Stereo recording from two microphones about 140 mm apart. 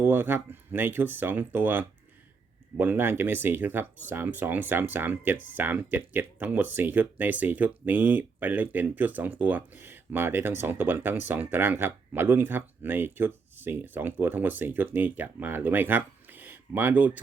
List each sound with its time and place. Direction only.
0.0 s speech: 15° right (ahead or behind)